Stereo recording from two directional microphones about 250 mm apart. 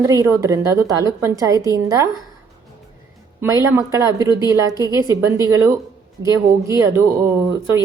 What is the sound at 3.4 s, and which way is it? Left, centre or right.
A woman's voice, centre.